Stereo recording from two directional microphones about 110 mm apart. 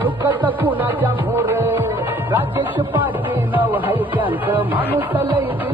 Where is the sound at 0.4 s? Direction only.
15° right (ahead or behind).